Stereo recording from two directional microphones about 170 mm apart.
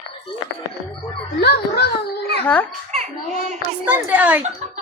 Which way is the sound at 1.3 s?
70° left (ahead or behind).